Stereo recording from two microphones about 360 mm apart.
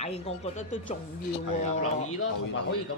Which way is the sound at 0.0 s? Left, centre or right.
Centre.